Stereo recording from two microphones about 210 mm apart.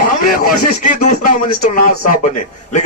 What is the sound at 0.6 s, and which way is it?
Speech, 40° left (ahead or behind).